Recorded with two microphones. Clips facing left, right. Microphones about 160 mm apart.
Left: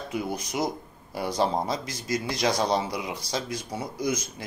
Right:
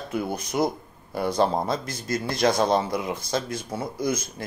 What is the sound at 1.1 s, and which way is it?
Speech, 10° left (ahead or behind).